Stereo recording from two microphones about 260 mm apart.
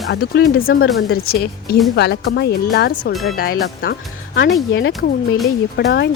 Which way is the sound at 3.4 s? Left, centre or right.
Left.